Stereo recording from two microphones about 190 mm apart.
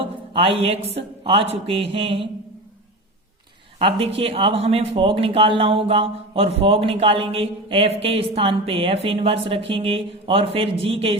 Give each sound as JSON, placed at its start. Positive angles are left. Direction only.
{"t": 0.0, "sound": "speech", "side_deg": -30}
{"t": 3.8, "sound": "speech", "side_deg": -30}